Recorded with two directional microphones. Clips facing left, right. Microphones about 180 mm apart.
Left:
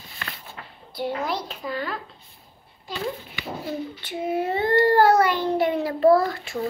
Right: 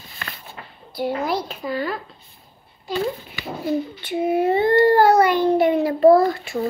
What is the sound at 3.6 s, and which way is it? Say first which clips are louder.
Child singing: right 10 dB; 15° right (ahead or behind).